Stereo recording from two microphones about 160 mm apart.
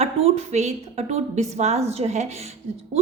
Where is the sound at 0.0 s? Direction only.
45° right (ahead or behind).